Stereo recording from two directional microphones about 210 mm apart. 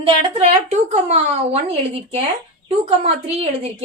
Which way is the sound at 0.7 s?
35° right (ahead or behind).